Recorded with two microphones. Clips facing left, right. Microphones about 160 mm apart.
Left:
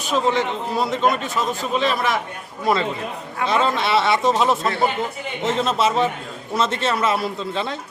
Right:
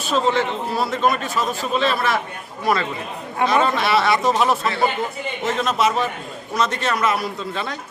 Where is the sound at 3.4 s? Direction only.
25° left (ahead or behind).